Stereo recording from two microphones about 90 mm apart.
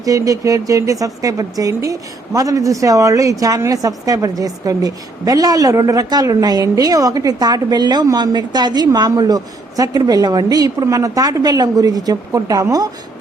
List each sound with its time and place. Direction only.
0.0 s a woman's voice: 40° right (ahead or behind)